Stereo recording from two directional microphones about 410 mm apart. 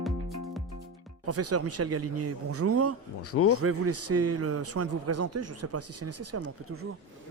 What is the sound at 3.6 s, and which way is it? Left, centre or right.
A man's voice, right.